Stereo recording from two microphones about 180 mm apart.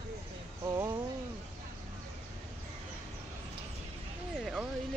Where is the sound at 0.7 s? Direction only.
20° right (ahead or behind).